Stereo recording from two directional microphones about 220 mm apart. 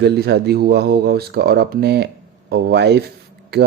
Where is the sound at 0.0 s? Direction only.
50° right (ahead or behind).